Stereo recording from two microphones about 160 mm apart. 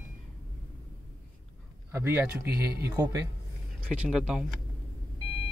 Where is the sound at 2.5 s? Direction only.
75° right (ahead or behind).